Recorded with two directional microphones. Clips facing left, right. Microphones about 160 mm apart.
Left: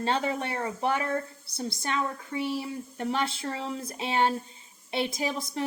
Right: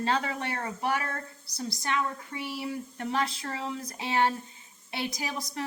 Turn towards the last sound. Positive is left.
turn(degrees=25)  # may be behind; listen again after turning